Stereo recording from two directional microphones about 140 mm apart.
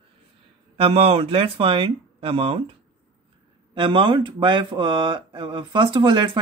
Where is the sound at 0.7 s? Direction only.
45° right (ahead or behind).